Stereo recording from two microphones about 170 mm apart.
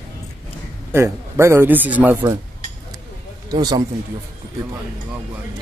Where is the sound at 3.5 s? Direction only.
25° right (ahead or behind).